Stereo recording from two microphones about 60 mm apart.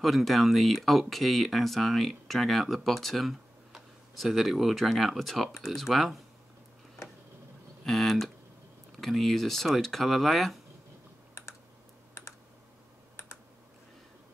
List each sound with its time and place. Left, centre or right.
0.0 s speech: centre
7.8 s speech: centre
12.1 s computer keyboard: left